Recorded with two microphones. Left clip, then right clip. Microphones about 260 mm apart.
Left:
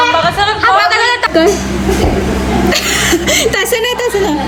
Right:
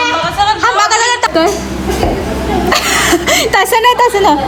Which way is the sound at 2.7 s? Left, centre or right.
Right.